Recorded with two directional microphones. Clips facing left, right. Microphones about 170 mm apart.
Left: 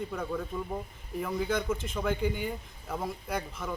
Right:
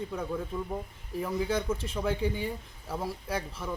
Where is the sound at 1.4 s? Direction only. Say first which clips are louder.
Even; 30° right (ahead or behind).